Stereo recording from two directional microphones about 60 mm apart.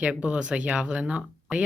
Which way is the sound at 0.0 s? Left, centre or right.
Right.